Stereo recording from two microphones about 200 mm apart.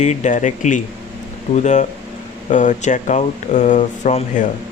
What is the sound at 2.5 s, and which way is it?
Speech, 40° left (ahead or behind).